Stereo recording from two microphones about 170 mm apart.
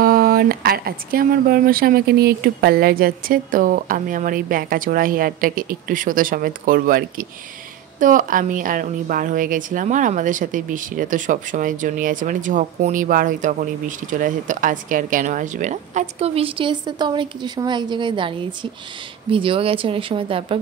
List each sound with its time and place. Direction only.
0.0 s a woman's voice: 60° right (ahead or behind); by 20.6 s 35° right (ahead or behind)